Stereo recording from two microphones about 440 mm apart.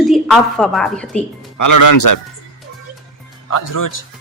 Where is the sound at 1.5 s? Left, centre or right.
Left.